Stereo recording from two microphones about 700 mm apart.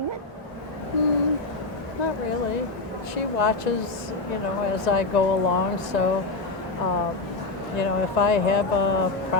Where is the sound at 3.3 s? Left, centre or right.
Left.